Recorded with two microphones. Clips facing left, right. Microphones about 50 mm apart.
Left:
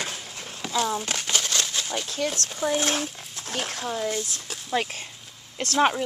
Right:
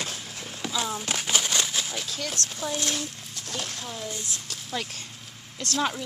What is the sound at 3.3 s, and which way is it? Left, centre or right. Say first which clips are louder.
Speech: left 4 dB; left.